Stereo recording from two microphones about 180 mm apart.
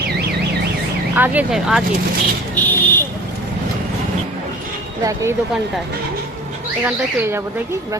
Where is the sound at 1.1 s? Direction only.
10° right (ahead or behind).